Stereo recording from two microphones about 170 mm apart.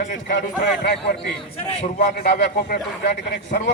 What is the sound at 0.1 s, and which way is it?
Speech, 50° left (ahead or behind).